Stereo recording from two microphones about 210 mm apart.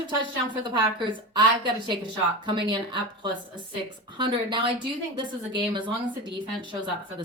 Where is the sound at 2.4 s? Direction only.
20° right (ahead or behind).